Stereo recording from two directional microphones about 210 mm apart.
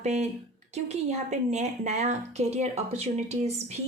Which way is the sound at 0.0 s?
30° right (ahead or behind).